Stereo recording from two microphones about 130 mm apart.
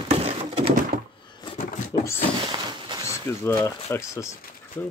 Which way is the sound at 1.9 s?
30° left (ahead or behind).